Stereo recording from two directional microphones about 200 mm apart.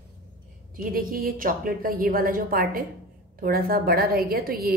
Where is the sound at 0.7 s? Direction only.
45° right (ahead or behind).